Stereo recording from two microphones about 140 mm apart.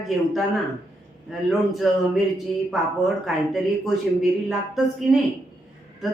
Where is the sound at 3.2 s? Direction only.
Centre (ahead or behind).